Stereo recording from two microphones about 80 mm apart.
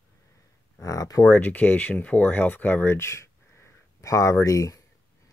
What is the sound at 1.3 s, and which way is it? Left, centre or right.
Speech, left.